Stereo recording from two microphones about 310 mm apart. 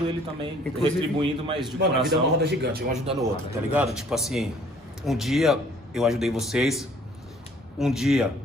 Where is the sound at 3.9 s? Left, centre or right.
Centre.